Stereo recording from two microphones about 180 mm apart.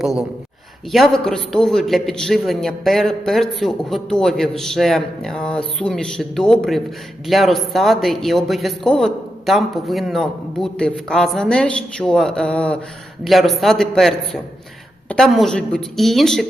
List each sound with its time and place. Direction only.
0.0 s a man's voice: 5° right (ahead or behind)